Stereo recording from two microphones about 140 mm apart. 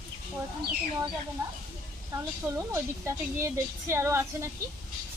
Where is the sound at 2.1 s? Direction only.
20° right (ahead or behind).